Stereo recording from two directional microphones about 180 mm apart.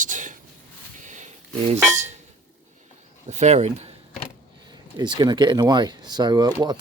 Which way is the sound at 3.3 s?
40° right (ahead or behind).